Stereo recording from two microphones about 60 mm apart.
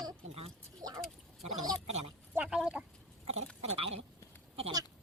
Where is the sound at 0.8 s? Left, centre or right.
Right.